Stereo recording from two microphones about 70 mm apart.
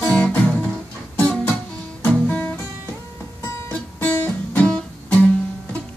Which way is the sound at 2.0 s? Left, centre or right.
Left.